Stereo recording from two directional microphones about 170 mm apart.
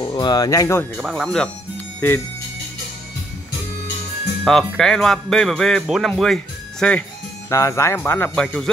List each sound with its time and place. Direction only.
0.1 s speech: 25° left (ahead or behind)
0.9 s speech: centre (ahead or behind)
4.5 s speech: centre (ahead or behind)